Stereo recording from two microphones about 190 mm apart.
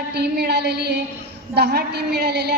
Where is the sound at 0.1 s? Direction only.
60° right (ahead or behind).